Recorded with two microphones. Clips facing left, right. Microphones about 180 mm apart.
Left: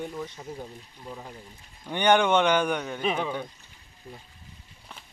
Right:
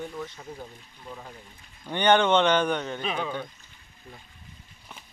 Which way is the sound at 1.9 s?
10° left (ahead or behind).